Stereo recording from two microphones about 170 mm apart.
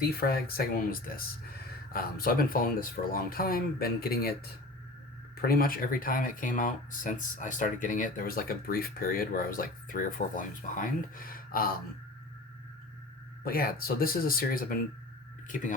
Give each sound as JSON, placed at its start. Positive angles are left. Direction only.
{"t": 0.1, "sound": "speech", "side_deg": 65}
{"t": 5.4, "sound": "speech", "side_deg": 60}
{"t": 13.4, "sound": "speech", "side_deg": 60}